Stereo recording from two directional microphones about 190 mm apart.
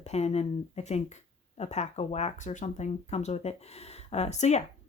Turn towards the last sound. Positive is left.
turn(degrees=35)  # may be behind; listen again after turning